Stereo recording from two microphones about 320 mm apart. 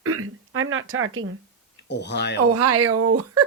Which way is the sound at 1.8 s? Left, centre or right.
Left.